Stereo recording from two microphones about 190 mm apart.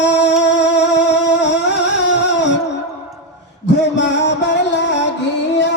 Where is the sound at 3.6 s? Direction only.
65° left (ahead or behind).